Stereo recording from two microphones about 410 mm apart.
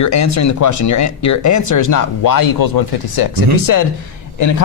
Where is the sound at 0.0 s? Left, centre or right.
Left.